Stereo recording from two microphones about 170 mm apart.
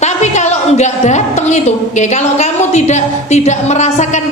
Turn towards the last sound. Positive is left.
turn(degrees=45)  # may be behind; listen again after turning